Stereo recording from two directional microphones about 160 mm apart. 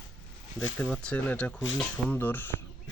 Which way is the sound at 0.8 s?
5° left (ahead or behind).